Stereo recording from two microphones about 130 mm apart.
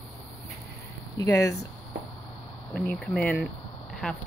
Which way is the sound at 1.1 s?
25° left (ahead or behind).